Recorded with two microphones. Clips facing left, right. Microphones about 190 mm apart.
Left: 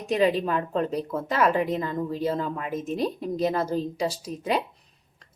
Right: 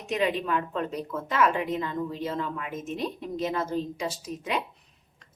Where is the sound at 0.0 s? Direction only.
35° left (ahead or behind).